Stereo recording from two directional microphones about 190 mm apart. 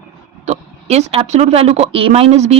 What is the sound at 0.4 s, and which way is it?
Speech, 35° right (ahead or behind).